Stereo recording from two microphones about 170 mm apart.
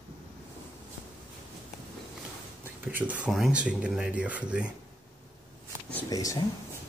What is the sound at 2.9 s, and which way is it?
Speech, 10° right (ahead or behind).